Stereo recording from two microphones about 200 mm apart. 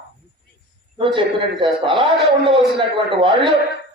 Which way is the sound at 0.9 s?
25° right (ahead or behind).